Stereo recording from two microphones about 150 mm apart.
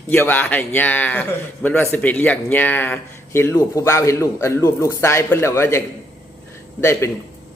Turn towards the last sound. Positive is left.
turn(degrees=15)  # may be behind; listen again after turning